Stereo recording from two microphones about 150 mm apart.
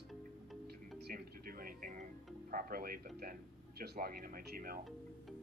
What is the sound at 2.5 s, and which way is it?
Speech, 75° right (ahead or behind).